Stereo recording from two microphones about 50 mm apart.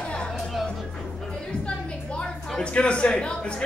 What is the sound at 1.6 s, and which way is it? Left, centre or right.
Music, left.